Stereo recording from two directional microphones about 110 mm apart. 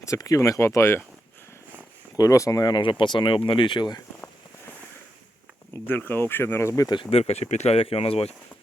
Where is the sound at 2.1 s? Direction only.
30° left (ahead or behind).